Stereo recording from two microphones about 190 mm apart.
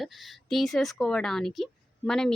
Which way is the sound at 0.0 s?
Centre (ahead or behind).